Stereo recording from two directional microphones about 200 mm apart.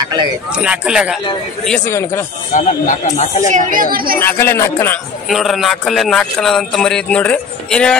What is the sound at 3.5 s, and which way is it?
Speech, 40° right (ahead or behind).